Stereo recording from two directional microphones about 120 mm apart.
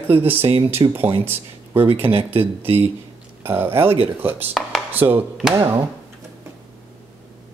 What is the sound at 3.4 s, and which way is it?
Speech, 20° right (ahead or behind).